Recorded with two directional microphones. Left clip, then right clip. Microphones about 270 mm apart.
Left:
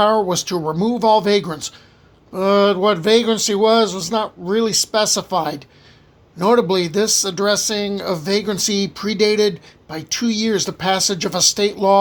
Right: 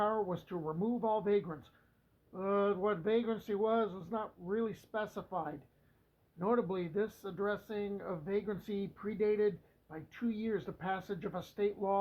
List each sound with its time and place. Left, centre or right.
0.0 s speech: left